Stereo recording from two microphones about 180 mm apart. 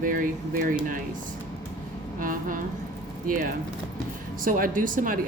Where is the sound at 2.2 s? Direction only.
50° right (ahead or behind).